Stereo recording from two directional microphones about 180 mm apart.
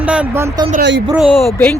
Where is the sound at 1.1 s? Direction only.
5° right (ahead or behind).